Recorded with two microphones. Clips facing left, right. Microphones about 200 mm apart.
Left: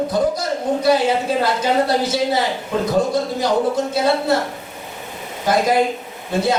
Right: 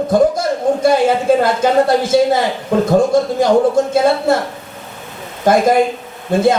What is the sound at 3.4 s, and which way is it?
Speech, 50° right (ahead or behind).